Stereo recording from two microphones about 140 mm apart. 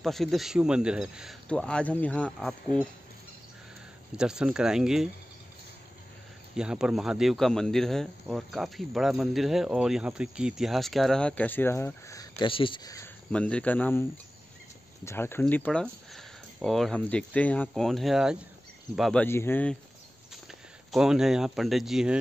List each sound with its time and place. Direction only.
0.0 s speech: centre (ahead or behind)
1.5 s speech: 5° left (ahead or behind)
4.2 s speech: 5° right (ahead or behind)
6.5 s speech: 5° right (ahead or behind); by 12.4 s 25° left (ahead or behind)
12.4 s speech: 40° left (ahead or behind)
13.3 s speech: 10° left (ahead or behind)
15.0 s speech: 15° left (ahead or behind); by 19.2 s centre (ahead or behind)
19.2 s speech: 15° left (ahead or behind)
20.9 s speech: 5° right (ahead or behind)